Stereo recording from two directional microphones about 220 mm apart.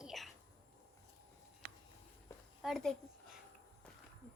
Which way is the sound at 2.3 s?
15° left (ahead or behind).